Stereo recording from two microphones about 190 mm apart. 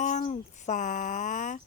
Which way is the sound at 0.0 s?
35° left (ahead or behind).